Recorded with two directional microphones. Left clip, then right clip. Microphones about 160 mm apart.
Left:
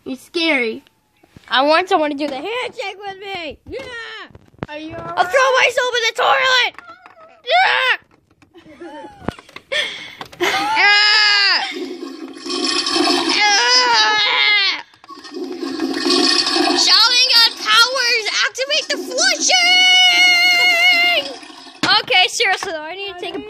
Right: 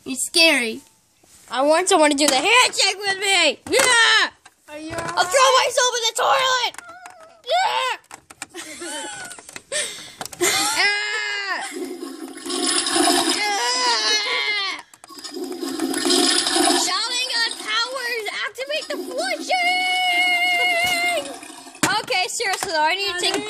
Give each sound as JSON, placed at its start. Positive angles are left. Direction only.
{"t": 0.0, "sound": "speech", "side_deg": -10}
{"t": 1.8, "sound": "speech", "side_deg": -25}
{"t": 2.4, "sound": "speech", "side_deg": 0}
{"t": 9.8, "sound": "gasp", "side_deg": 35}
{"t": 10.8, "sound": "baby cry", "side_deg": 15}
{"t": 12.9, "sound": "toilet flush", "side_deg": -10}
{"t": 13.4, "sound": "baby cry", "side_deg": 20}
{"t": 15.3, "sound": "toilet flush", "side_deg": -10}
{"t": 16.8, "sound": "a sound", "side_deg": 20}
{"t": 19.0, "sound": "music", "side_deg": 20}
{"t": 21.8, "sound": "speech", "side_deg": 0}